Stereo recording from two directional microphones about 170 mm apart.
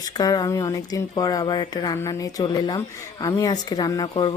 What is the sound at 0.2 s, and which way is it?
Speech, 20° left (ahead or behind).